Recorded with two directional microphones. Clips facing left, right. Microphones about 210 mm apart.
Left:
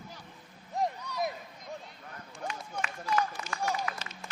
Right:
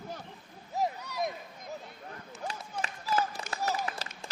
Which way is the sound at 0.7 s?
5° right (ahead or behind).